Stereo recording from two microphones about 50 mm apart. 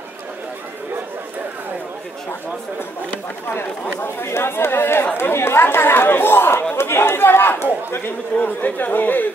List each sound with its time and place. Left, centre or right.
3.5 s speech: left
8.4 s speech: left